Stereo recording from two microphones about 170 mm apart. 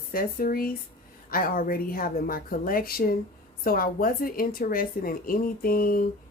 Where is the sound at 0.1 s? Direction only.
60° left (ahead or behind).